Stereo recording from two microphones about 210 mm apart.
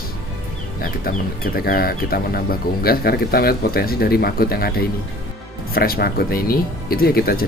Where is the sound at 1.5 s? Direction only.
45° left (ahead or behind).